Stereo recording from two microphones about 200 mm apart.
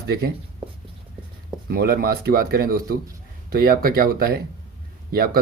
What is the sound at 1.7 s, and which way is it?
Speech, 50° right (ahead or behind).